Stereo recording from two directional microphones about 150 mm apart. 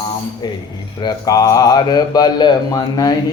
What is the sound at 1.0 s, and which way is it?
Speech, 25° left (ahead or behind).